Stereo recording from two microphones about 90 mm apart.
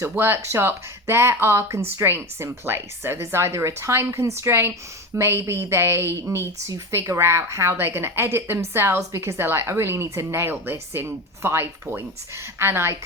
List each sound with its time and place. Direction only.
0.0 s a woman's voice: 30° right (ahead or behind)